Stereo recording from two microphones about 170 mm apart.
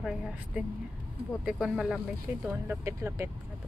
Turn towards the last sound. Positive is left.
turn(degrees=-15)  # may be behind; listen again after turning